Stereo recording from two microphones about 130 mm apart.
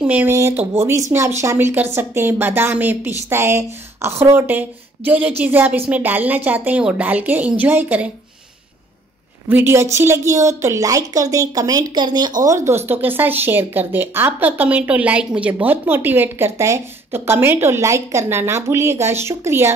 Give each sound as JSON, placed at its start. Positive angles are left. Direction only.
{"t": 0.0, "sound": "a woman's voice", "side_deg": -10}
{"t": 9.5, "sound": "a woman's voice", "side_deg": -15}